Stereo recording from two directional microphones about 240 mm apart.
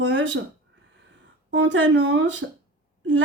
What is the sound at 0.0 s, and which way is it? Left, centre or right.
Speech, right.